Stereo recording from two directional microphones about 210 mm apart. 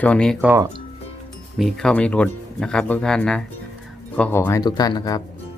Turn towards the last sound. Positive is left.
turn(degrees=20)  # may be behind; listen again after turning